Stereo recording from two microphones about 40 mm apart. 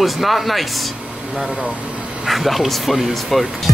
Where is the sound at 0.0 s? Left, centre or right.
Centre.